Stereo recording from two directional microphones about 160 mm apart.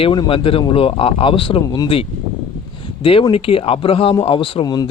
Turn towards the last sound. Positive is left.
turn(degrees=30)  # may be behind; listen again after turning